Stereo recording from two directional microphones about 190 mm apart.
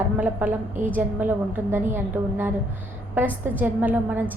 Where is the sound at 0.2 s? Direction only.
10° right (ahead or behind).